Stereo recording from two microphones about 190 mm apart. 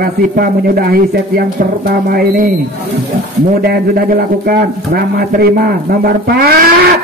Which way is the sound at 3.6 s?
55° right (ahead or behind).